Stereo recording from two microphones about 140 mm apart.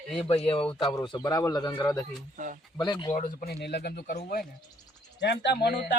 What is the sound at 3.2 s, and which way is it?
Speech, 70° left (ahead or behind).